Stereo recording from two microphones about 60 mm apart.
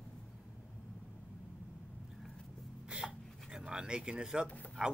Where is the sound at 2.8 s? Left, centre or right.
Centre.